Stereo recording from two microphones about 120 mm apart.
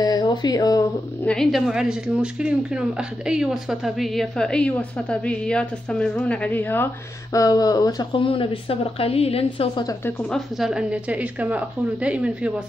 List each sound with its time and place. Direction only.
0.0 s a sound: 35° left (ahead or behind)
1.2 s a woman's voice: 5° left (ahead or behind)
1.7 s a woman's voice: 5° right (ahead or behind); by 6.9 s 15° left (ahead or behind)
7.3 s speech: 30° left (ahead or behind); by 9.8 s 55° left (ahead or behind)
10.3 s a woman's voice: 5° right (ahead or behind)